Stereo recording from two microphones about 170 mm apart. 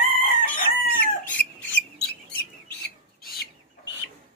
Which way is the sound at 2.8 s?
70° left (ahead or behind).